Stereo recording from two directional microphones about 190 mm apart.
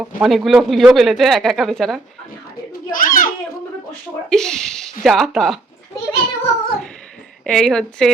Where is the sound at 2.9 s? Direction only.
45° left (ahead or behind).